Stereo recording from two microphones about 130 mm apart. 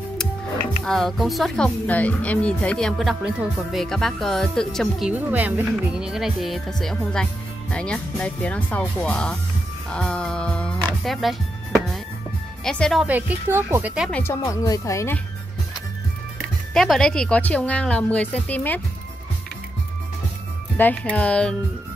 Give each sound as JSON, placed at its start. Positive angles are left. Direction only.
{"t": 0.8, "sound": "speech", "side_deg": 0}
{"t": 1.9, "sound": "speech", "side_deg": 10}
{"t": 5.1, "sound": "a woman's voice", "side_deg": -15}
{"t": 11.1, "sound": "music", "side_deg": 0}
{"t": 12.6, "sound": "speech", "side_deg": 5}
{"t": 13.0, "sound": "speech", "side_deg": -10}
{"t": 14.1, "sound": "speech", "side_deg": 20}
{"t": 16.7, "sound": "a woman's voice", "side_deg": 5}
{"t": 20.7, "sound": "a woman's voice", "side_deg": 10}